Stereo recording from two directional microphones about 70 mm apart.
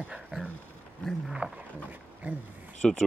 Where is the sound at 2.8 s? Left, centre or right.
Centre.